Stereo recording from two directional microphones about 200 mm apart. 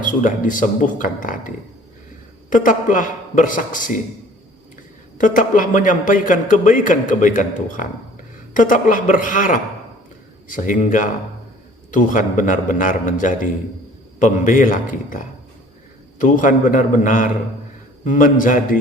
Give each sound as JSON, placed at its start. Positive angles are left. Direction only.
{"t": 0.0, "sound": "a man's voice", "side_deg": 40}
{"t": 5.1, "sound": "a man's voice", "side_deg": 40}